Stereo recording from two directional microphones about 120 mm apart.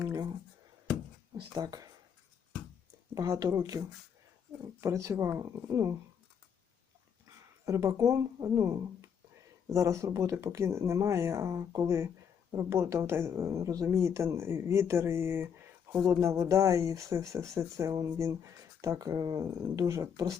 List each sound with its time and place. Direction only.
0.0 s a sound: 30° right (ahead or behind)
1.5 s speech: 35° right (ahead or behind)
3.2 s speech: 30° right (ahead or behind)
7.6 s speech: 25° right (ahead or behind)